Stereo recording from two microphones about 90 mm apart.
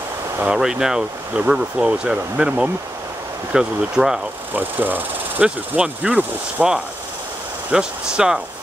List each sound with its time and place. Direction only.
0.4 s speech: 10° right (ahead or behind)
4.6 s speech: 20° right (ahead or behind)